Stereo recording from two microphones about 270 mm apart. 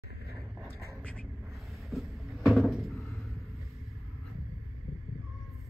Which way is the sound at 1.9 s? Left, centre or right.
Centre.